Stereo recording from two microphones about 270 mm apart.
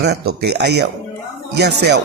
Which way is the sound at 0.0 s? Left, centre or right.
Right.